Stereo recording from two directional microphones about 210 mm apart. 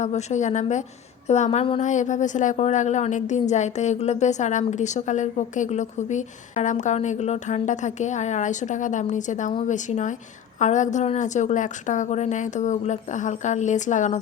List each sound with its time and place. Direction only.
0.0 s a woman's voice: 35° left (ahead or behind)